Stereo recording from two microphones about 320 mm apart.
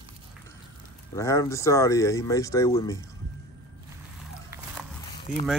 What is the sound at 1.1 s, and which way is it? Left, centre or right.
Speech, centre.